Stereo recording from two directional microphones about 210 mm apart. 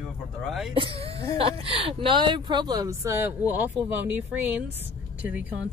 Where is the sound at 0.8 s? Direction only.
25° right (ahead or behind); by 4.6 s 10° right (ahead or behind).